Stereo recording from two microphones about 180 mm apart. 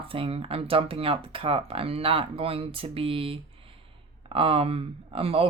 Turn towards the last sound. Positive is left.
turn(degrees=-30)  # may be behind; listen again after turning